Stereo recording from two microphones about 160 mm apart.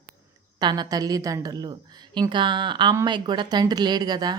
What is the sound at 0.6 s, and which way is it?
Speech, 25° right (ahead or behind).